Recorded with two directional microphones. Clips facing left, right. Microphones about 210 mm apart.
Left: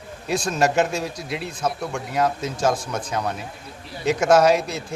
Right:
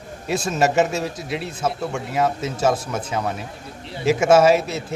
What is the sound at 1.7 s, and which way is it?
Speech, 25° right (ahead or behind).